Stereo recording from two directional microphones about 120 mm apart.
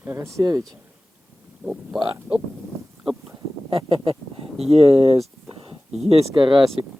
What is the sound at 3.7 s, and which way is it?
Speech, 45° right (ahead or behind).